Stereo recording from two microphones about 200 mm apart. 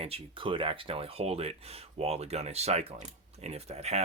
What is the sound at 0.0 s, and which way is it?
Speech, 25° right (ahead or behind).